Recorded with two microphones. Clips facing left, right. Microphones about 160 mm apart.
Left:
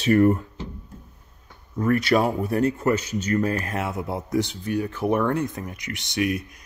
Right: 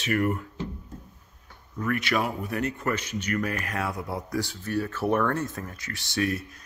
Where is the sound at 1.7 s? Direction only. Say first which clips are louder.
Left 7 dB; 35° left (ahead or behind).